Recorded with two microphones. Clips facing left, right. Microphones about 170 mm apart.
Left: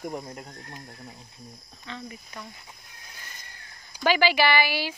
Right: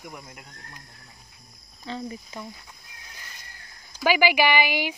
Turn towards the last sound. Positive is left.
turn(degrees=-15)  # may be behind; listen again after turning